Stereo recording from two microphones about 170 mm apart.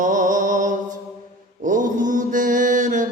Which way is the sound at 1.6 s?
50° right (ahead or behind).